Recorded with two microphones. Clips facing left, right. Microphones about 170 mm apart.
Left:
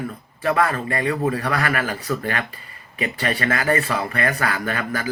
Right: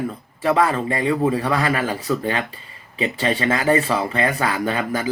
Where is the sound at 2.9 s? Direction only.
20° right (ahead or behind).